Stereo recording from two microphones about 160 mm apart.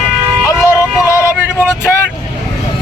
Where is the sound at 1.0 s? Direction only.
20° left (ahead or behind).